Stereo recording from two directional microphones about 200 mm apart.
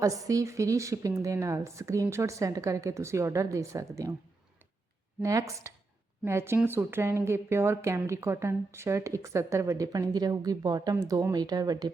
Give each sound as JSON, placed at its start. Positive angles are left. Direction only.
{"t": 0.0, "sound": "speech", "side_deg": -15}
{"t": 5.2, "sound": "speech", "side_deg": -15}